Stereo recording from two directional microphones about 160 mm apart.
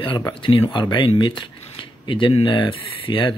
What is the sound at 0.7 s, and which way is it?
Speech, 30° left (ahead or behind).